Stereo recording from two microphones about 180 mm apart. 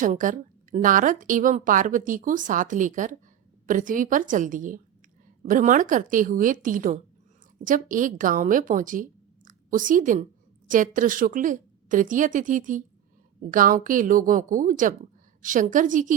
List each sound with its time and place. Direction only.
0.0 s a woman's voice: 45° right (ahead or behind)